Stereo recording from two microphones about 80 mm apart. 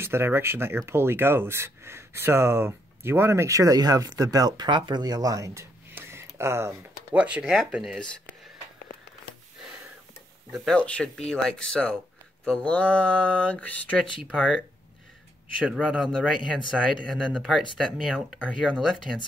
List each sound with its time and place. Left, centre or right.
0.0 s speech: right
5.9 s a sound: right
7.2 s speech: centre
10.7 s speech: centre
15.6 s speech: centre
16.0 s speech: centre